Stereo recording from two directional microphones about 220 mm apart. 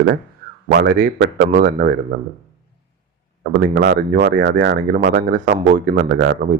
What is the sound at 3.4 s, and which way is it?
Speech, 40° right (ahead or behind).